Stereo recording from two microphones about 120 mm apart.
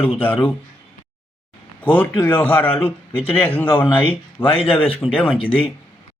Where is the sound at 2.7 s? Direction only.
50° left (ahead or behind).